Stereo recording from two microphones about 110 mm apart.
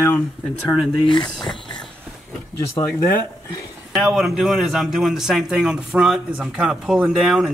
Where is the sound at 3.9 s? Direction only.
Centre (ahead or behind).